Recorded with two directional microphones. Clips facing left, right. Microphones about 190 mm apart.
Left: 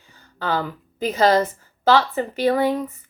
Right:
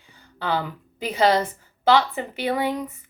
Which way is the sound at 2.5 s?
15° right (ahead or behind).